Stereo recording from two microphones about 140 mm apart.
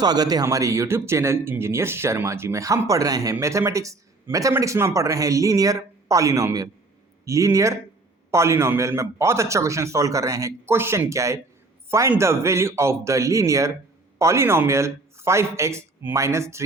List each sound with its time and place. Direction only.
0.0 s speech: 30° right (ahead or behind)